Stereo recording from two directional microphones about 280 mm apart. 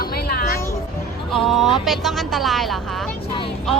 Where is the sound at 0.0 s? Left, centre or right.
Left.